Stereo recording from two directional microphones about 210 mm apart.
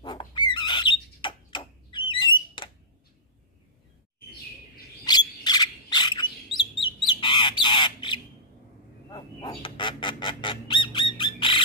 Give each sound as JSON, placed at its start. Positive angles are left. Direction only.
{"t": 0.0, "sound": "squawk", "side_deg": 20}
{"t": 5.0, "sound": "bird", "side_deg": 20}
{"t": 7.1, "sound": "squawk", "side_deg": 20}